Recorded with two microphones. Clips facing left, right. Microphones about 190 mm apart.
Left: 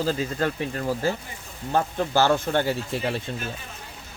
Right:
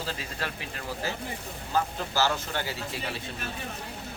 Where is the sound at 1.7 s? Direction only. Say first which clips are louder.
Left 6 dB; 55° left (ahead or behind).